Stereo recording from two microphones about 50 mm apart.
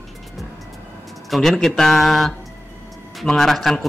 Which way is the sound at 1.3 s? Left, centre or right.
Centre.